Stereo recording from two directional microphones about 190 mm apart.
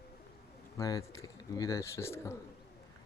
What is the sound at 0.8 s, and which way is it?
Bird, 20° left (ahead or behind).